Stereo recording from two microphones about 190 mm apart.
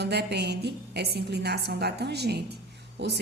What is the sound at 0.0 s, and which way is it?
A woman's voice, 60° right (ahead or behind).